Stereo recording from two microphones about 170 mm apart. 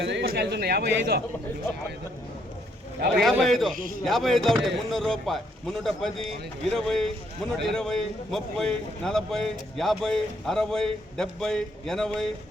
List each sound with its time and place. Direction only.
0.0 s a man's voice: 85° right; by 1.2 s 70° right (ahead or behind)
3.2 s a man's voice: centre (ahead or behind)
3.8 s a man's voice: 55° right (ahead or behind)
4.0 s a man's voice: centre (ahead or behind)